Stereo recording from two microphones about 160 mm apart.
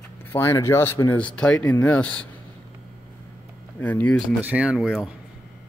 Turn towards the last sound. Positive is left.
turn(degrees=-5)  # may be behind; listen again after turning